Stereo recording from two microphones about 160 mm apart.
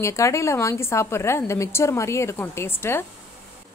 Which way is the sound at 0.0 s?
20° left (ahead or behind).